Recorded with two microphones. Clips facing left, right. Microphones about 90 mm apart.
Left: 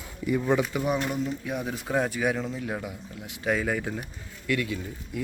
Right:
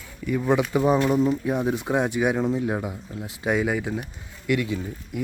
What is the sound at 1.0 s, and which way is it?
Speech, 45° right (ahead or behind).